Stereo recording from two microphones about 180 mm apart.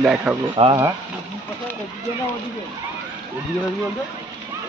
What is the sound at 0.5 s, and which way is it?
Speech, 30° right (ahead or behind).